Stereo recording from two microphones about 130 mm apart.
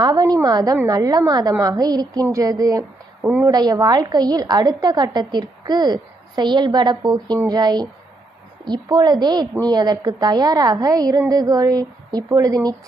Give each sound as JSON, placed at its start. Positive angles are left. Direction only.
{"t": 0.0, "sound": "a woman's voice", "side_deg": -30}
{"t": 3.2, "sound": "a woman's voice", "side_deg": -15}
{"t": 3.5, "sound": "a woman's voice", "side_deg": -30}